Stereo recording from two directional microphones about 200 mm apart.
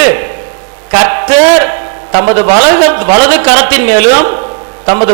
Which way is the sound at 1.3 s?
15° right (ahead or behind).